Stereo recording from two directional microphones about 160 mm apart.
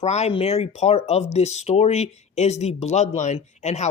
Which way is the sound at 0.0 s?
45° left (ahead or behind).